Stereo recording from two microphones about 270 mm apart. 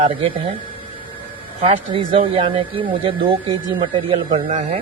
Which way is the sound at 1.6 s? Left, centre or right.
Right.